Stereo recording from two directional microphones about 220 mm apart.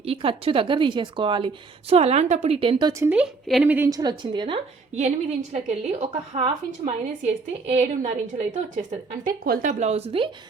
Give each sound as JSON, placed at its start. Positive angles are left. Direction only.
{"t": 0.0, "sound": "a woman's voice", "side_deg": -25}
{"t": 3.1, "sound": "a woman's voice", "side_deg": -5}